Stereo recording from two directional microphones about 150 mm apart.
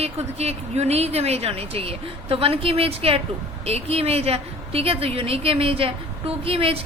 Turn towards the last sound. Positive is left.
turn(degrees=-40)  # may be behind; listen again after turning